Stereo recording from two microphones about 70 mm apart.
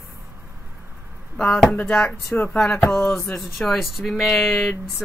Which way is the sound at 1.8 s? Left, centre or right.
Centre.